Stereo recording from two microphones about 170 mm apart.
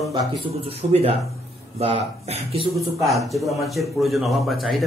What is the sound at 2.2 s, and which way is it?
Speech, 35° right (ahead or behind).